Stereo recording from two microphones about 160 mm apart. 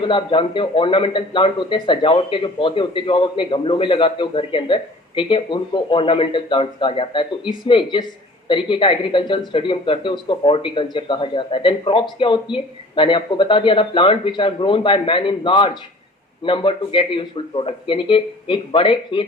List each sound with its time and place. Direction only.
0.0 s a man's voice: 30° left (ahead or behind)